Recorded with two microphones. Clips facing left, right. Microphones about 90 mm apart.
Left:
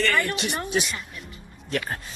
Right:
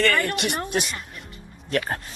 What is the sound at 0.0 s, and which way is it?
Speech, 60° right (ahead or behind).